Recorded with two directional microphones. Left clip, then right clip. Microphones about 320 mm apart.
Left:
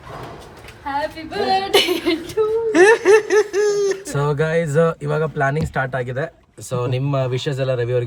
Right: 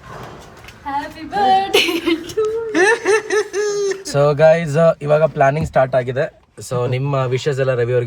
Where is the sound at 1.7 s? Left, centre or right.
Left.